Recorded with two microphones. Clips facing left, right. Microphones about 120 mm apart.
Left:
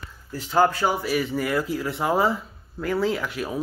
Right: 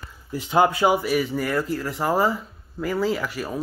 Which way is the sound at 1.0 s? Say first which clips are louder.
Right 1 dB; centre (ahead or behind).